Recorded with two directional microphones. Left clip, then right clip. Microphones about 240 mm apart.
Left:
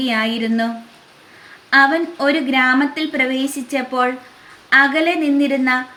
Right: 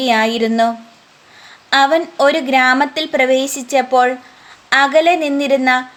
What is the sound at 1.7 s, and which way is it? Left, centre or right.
A woman's voice, right.